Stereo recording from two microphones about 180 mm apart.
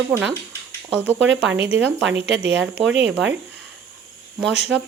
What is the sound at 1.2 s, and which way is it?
Speech, 90° right.